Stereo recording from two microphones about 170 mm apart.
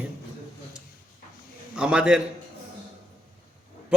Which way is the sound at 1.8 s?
5° right (ahead or behind).